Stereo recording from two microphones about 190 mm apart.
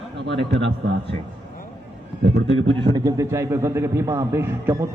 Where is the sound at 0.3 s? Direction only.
70° right (ahead or behind).